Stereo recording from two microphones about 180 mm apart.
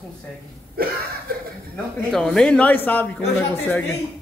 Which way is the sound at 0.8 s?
55° right (ahead or behind).